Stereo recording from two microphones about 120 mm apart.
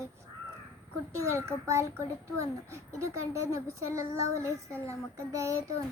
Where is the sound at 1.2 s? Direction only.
25° right (ahead or behind).